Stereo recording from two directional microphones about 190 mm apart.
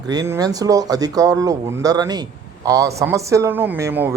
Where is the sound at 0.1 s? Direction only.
20° right (ahead or behind).